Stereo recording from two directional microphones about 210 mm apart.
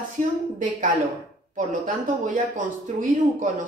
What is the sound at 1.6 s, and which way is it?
Speech, 35° right (ahead or behind).